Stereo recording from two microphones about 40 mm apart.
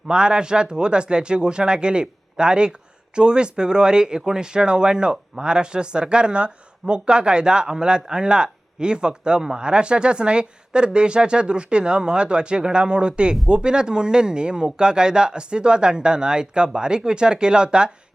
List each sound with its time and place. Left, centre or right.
0.1 s speech: right